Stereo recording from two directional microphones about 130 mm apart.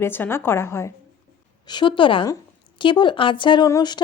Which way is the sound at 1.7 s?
35° left (ahead or behind).